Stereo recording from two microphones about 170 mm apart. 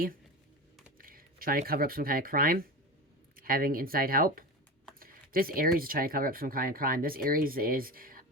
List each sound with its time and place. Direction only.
0.9 s speech: 55° right (ahead or behind)